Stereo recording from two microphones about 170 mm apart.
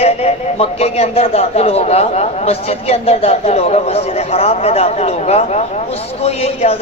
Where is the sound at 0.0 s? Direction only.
40° left (ahead or behind).